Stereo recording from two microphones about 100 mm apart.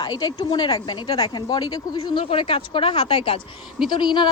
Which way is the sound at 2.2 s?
75° left (ahead or behind).